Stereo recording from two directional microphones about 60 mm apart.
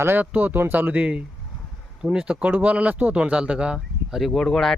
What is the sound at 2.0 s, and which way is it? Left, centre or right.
Speech, centre.